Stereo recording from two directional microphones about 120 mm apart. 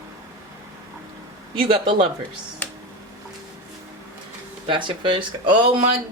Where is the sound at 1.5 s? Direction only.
50° right (ahead or behind).